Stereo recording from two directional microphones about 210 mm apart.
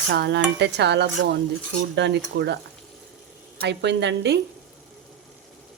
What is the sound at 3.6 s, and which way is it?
Speech, 55° right (ahead or behind).